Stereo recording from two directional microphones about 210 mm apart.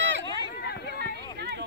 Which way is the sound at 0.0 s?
60° right (ahead or behind).